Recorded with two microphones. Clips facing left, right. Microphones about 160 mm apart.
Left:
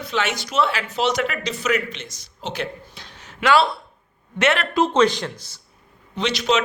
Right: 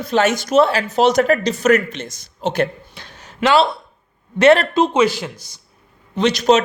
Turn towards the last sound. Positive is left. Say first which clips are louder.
# right 7 dB
turn(degrees=-45)  # may be behind; listen again after turning